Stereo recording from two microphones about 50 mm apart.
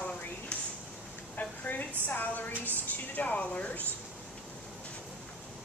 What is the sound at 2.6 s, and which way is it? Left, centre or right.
A woman's voice, left.